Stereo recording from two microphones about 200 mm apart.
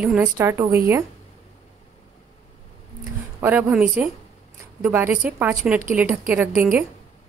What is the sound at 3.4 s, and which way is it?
A woman's voice, 10° right (ahead or behind).